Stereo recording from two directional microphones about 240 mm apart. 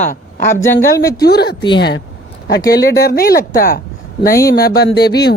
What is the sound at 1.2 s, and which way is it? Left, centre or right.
Speech, left.